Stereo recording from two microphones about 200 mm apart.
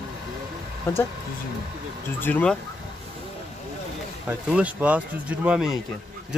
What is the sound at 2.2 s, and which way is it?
Speech, 5° left (ahead or behind).